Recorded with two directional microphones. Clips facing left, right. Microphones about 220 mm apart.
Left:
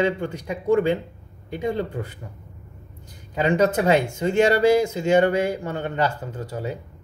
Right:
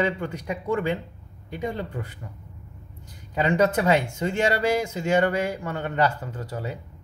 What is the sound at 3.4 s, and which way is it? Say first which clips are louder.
Speech: left 2 dB; 25° left (ahead or behind).